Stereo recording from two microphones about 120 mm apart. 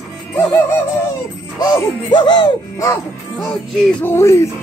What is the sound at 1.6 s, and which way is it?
Music, 35° left (ahead or behind).